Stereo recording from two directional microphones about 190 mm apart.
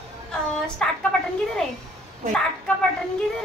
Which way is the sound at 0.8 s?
5° left (ahead or behind).